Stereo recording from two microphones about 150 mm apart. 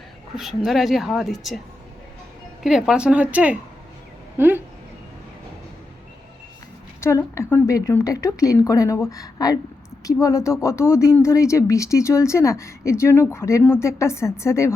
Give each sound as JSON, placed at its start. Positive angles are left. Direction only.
{"t": 0.3, "sound": "a woman's voice", "side_deg": 0}
{"t": 2.6, "sound": "a woman's voice", "side_deg": -5}
{"t": 7.0, "sound": "speech", "side_deg": 20}